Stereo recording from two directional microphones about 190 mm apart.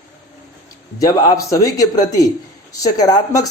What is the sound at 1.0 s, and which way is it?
A man's voice, 15° left (ahead or behind).